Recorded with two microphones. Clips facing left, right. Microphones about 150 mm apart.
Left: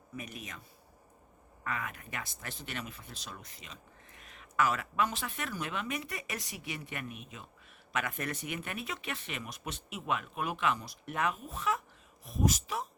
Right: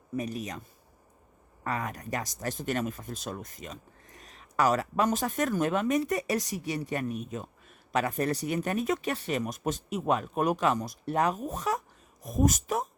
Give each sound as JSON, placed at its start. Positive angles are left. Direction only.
{"t": 0.2, "sound": "speech", "side_deg": -40}
{"t": 1.6, "sound": "speech", "side_deg": -40}